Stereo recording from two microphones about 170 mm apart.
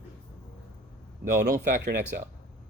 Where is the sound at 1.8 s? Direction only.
70° right (ahead or behind).